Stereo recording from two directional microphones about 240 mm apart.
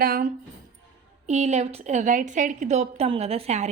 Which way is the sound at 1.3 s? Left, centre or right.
Right.